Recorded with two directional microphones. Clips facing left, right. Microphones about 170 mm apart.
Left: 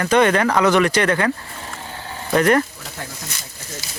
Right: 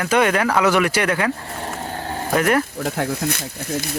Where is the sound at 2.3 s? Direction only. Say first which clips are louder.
Left 2 dB; 5° right (ahead or behind).